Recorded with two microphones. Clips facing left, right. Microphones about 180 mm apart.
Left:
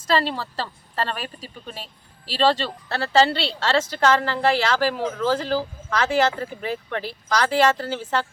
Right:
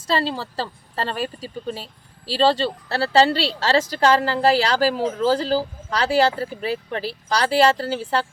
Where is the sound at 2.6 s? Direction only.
35° right (ahead or behind).